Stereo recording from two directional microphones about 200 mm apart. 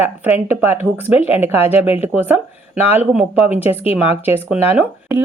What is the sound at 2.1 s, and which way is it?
Speech, 10° right (ahead or behind).